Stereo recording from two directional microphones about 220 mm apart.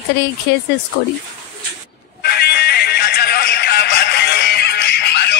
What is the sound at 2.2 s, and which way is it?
Music, 45° left (ahead or behind).